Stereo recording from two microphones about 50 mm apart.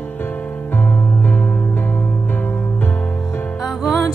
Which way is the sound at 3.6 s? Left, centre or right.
Centre.